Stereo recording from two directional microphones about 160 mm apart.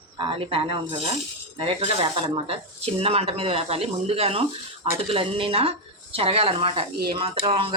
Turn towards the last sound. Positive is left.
turn(degrees=-35)  # may be behind; listen again after turning